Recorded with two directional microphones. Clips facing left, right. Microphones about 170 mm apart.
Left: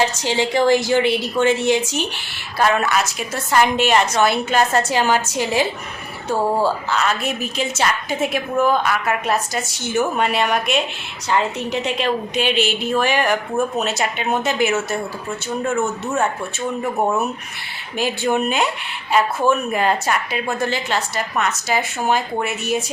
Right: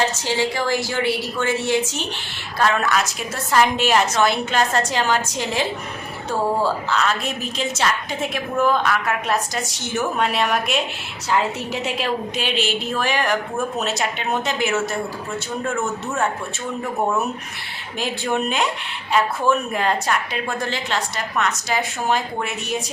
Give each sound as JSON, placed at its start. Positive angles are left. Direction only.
{"t": 0.2, "sound": "a woman's voice", "side_deg": 20}
{"t": 17.9, "sound": "a woman's voice", "side_deg": 5}